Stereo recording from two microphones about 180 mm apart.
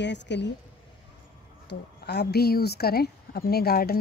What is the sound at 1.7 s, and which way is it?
Speech, 70° left (ahead or behind).